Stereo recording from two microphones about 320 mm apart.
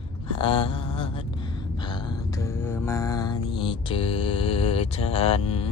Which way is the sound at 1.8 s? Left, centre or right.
Centre.